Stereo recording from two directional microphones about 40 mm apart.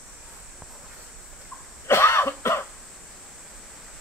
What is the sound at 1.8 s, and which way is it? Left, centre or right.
Cough, left.